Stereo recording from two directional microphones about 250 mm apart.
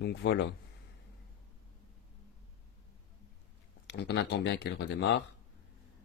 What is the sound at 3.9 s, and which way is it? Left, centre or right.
Speech, left.